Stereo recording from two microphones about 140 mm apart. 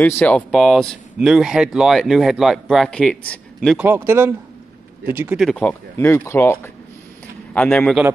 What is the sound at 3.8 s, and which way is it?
Speech, 15° right (ahead or behind).